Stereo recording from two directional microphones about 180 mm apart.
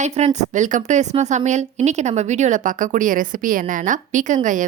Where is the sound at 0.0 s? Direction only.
40° right (ahead or behind).